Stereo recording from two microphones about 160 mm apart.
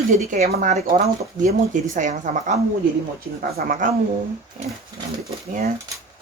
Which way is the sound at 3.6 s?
60° right (ahead or behind).